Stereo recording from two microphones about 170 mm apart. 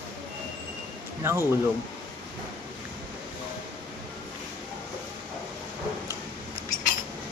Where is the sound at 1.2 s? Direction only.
15° right (ahead or behind).